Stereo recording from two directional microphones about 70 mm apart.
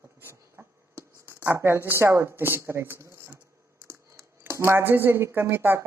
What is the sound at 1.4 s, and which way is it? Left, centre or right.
A woman's voice, right.